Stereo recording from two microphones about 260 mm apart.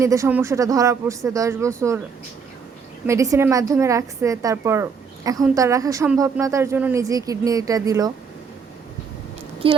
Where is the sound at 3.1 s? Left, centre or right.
Centre.